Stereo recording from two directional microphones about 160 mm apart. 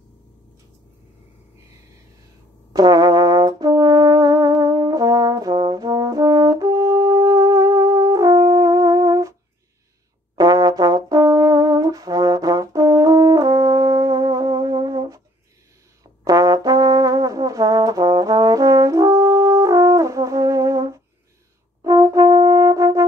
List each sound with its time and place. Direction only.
2.7 s brass instrument: 25° right (ahead or behind)
10.3 s brass instrument: 25° right (ahead or behind)
16.3 s brass instrument: 20° right (ahead or behind)